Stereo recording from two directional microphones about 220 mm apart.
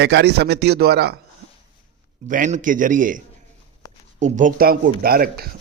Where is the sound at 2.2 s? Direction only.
35° right (ahead or behind).